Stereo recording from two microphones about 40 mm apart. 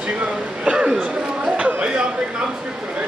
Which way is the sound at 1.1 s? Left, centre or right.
Right.